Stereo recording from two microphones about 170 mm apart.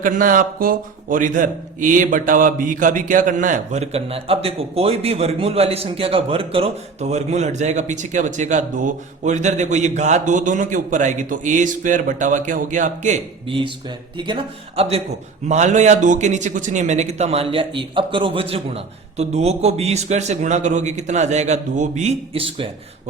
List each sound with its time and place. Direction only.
0.0 s a man's voice: 55° right (ahead or behind)
13.5 s a man's voice: 30° right (ahead or behind)
14.8 s a man's voice: 35° right (ahead or behind)